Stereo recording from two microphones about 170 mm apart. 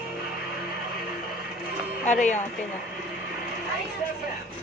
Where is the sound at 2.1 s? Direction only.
45° left (ahead or behind).